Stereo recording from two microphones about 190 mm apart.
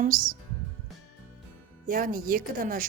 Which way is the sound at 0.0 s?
45° right (ahead or behind).